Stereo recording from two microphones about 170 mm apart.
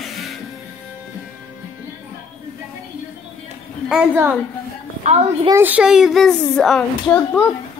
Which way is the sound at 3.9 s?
10° right (ahead or behind).